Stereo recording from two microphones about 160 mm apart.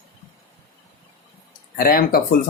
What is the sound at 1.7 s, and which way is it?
Speech, 65° left (ahead or behind).